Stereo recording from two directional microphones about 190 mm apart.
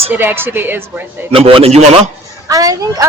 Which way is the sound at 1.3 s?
30° right (ahead or behind).